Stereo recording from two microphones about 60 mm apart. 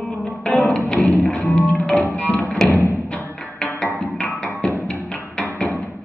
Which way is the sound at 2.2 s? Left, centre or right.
Centre.